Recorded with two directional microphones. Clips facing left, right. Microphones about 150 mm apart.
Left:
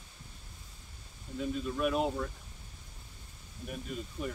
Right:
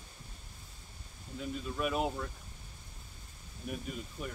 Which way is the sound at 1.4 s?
Centre (ahead or behind).